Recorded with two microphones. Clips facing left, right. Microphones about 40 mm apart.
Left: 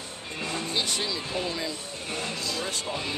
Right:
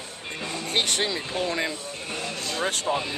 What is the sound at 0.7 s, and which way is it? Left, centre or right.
Speech, right.